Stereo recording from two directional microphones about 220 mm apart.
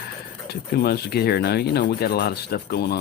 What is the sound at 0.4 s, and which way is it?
Speech, 45° left (ahead or behind).